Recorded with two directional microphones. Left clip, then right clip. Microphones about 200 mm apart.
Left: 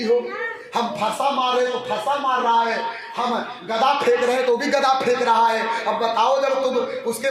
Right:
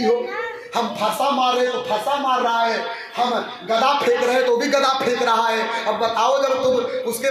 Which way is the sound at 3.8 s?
5° left (ahead or behind).